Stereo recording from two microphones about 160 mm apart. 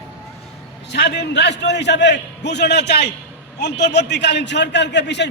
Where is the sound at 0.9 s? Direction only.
90° left.